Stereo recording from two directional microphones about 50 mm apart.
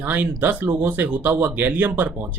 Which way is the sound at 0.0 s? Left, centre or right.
Right.